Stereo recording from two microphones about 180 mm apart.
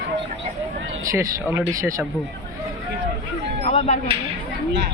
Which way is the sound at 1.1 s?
15° right (ahead or behind).